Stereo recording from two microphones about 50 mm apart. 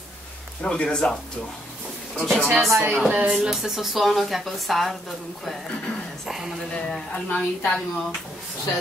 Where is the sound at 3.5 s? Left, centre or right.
Centre.